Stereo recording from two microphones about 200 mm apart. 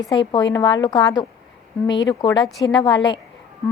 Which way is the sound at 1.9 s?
65° left (ahead or behind).